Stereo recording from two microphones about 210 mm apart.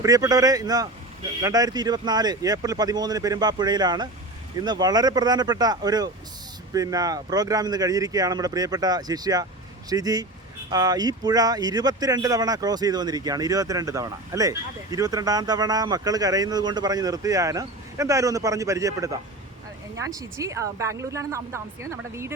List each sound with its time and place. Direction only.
0.0 s speech: 15° right (ahead or behind)